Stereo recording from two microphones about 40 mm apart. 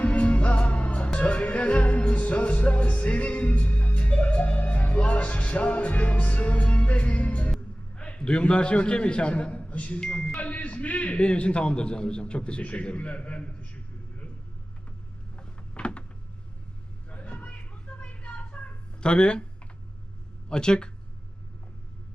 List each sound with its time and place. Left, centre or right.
0.0 s music: left
7.9 s a man's voice: left
10.0 s a man's voice: left
10.4 s a man's voice: left
15.4 s a sound: left
17.4 s a sound: left
20.5 s a man's voice: left